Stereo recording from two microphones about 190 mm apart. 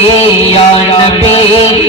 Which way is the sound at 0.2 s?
30° left (ahead or behind).